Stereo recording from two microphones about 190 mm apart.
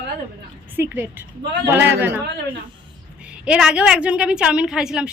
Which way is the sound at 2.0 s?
10° right (ahead or behind).